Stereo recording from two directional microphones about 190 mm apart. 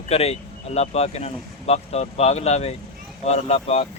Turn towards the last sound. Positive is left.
turn(degrees=35)  # may be behind; listen again after turning